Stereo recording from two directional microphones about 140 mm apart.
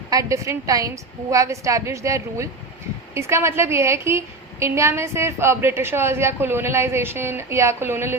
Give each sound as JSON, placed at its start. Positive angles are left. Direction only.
{"t": 0.1, "sound": "a woman's voice", "side_deg": -25}